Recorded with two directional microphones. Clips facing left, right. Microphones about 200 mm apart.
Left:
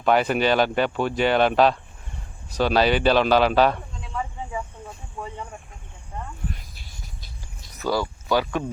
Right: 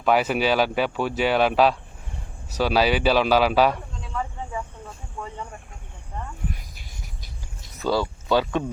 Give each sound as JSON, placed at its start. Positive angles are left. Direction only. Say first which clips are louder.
{"t": 0.0, "sound": "speech", "louder": "left 1 dB", "side_deg": -5}
{"t": 4.1, "sound": "cricket", "louder": "even", "side_deg": 10}
{"t": 7.8, "sound": "speech", "louder": "right 1 dB", "side_deg": -25}